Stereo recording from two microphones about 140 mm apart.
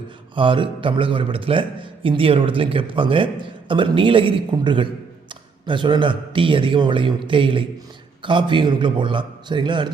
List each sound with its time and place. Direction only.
0.3 s a man's voice: 35° right (ahead or behind)